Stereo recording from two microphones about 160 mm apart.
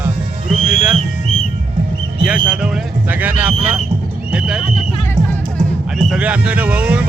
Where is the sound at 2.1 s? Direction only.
5° right (ahead or behind).